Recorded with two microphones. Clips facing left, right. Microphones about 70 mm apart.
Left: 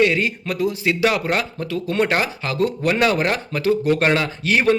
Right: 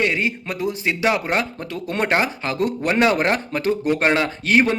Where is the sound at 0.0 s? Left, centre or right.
Right.